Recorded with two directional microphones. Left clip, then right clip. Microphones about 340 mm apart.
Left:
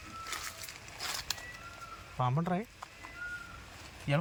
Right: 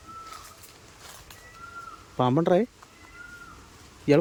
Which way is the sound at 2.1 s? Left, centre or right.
Right.